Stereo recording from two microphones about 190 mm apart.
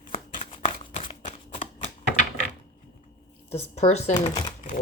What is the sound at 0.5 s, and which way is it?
Shuffling cards, 25° left (ahead or behind).